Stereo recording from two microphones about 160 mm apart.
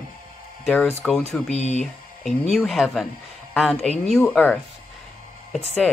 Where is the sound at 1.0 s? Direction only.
5° left (ahead or behind).